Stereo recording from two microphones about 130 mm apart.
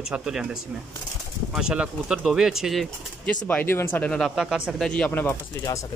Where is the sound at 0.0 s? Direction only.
5° right (ahead or behind).